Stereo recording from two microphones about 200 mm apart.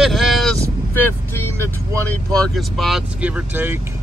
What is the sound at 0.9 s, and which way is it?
Speech, 10° left (ahead or behind).